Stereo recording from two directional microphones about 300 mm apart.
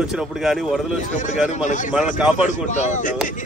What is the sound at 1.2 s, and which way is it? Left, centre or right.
Speech, left.